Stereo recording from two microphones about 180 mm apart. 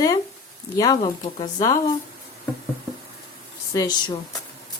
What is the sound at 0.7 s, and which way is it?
Speech, 20° left (ahead or behind).